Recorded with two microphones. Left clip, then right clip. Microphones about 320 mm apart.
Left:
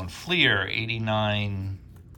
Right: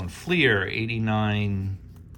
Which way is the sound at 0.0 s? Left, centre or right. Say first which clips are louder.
Even; centre.